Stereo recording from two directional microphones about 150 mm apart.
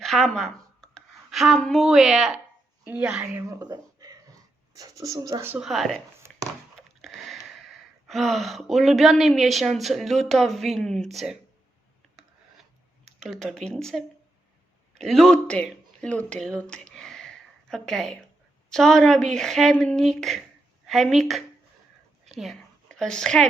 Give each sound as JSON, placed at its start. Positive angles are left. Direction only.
{"t": 0.0, "sound": "a woman's voice", "side_deg": 0}
{"t": 3.5, "sound": "a sound", "side_deg": -25}
{"t": 4.7, "sound": "speech", "side_deg": -25}
{"t": 5.6, "sound": "speech", "side_deg": 0}
{"t": 6.3, "sound": "a sound", "side_deg": 5}
{"t": 7.0, "sound": "speech", "side_deg": 0}
{"t": 13.1, "sound": "speech", "side_deg": 0}
{"t": 15.0, "sound": "speech", "side_deg": 0}
{"t": 16.0, "sound": "a sound", "side_deg": 10}
{"t": 18.7, "sound": "a woman's voice", "side_deg": 5}